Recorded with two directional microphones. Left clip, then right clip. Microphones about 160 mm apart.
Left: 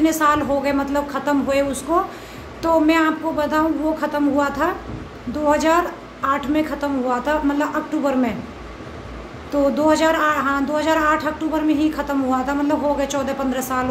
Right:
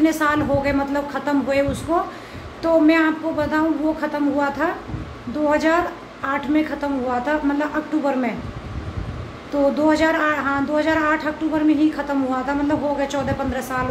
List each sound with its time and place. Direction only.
0.0 s speech: centre (ahead or behind)
9.8 s speech: centre (ahead or behind)